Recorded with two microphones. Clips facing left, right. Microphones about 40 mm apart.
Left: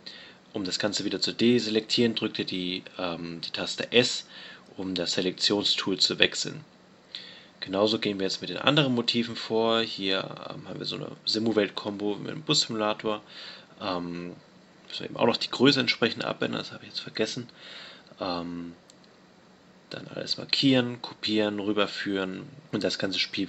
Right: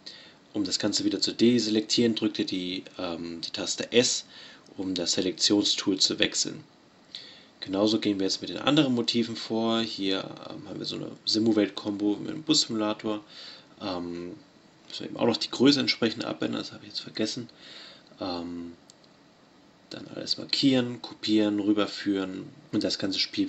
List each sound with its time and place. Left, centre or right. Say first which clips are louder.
0.5 s speech: right 1 dB; left
19.9 s speech: left 1 dB; left